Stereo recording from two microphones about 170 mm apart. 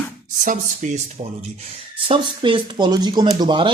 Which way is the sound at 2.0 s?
30° right (ahead or behind).